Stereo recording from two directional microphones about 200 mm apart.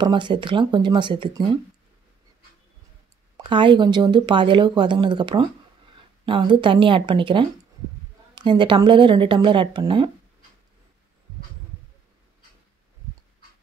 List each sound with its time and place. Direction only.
0.0 s speech: 25° right (ahead or behind)
3.4 s speech: 25° right (ahead or behind)